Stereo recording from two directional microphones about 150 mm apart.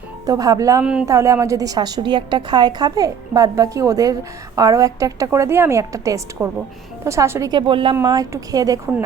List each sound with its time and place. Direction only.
0.3 s a woman's voice: 25° right (ahead or behind)
7.9 s a woman's voice: 25° right (ahead or behind)